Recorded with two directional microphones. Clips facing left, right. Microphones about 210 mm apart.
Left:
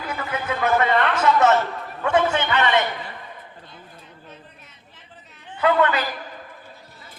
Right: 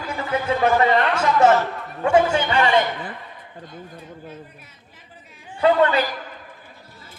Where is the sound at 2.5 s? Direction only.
30° right (ahead or behind).